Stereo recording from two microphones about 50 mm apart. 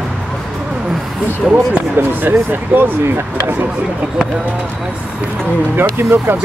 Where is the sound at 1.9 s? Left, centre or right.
Right.